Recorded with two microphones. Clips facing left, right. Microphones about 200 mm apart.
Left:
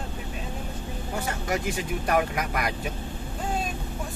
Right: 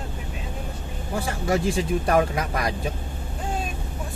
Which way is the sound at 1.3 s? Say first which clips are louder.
Right 6 dB; 30° right (ahead or behind).